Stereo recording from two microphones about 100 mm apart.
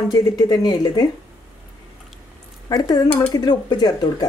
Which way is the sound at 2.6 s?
40° left (ahead or behind).